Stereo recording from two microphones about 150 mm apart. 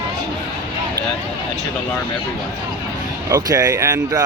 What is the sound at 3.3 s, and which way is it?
Speech, 25° right (ahead or behind).